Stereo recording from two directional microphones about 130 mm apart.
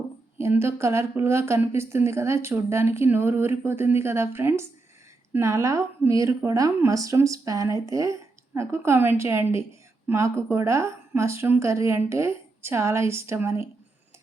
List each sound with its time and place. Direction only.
0.3 s a woman's voice: 20° right (ahead or behind)